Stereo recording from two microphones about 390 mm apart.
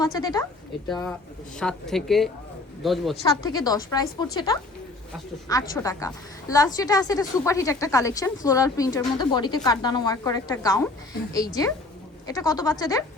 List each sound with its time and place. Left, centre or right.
0.0 s a woman's voice: centre